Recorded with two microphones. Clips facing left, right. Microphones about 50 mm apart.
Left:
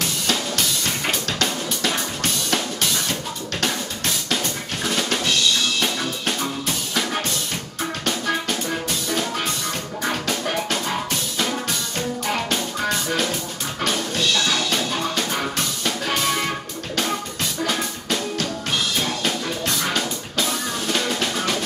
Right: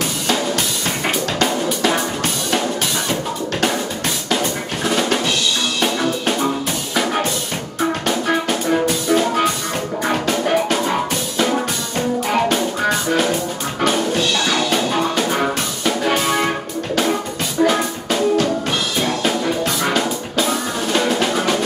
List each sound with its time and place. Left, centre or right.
0.3 s drum: centre
4.8 s drum: centre
8.1 s music: centre
17.6 s music: centre